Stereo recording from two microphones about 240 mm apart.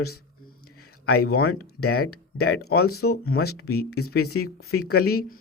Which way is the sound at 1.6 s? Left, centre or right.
Left.